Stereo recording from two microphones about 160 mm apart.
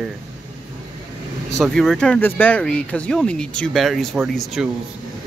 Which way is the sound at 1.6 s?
5° left (ahead or behind).